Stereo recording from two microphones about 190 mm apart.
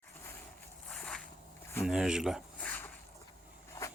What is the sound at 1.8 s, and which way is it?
Speech, 5° right (ahead or behind).